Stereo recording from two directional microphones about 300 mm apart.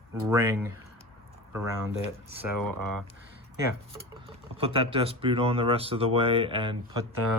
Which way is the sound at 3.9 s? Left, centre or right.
Centre.